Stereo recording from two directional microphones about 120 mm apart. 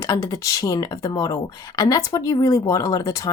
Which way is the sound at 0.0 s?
25° left (ahead or behind).